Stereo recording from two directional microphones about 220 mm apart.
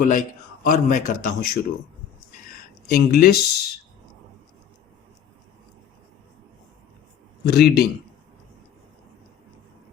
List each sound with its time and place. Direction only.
0.1 s a man's voice: 35° left (ahead or behind)
7.4 s a man's voice: 45° left (ahead or behind)